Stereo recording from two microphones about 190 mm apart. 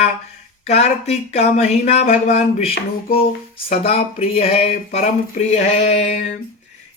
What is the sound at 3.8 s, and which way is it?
A man's voice, 30° left (ahead or behind).